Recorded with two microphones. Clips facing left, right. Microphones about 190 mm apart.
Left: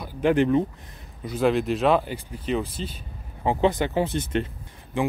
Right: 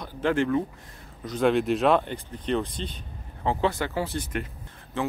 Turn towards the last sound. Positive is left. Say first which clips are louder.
# left 4 dB
turn(degrees=15)  # may be behind; listen again after turning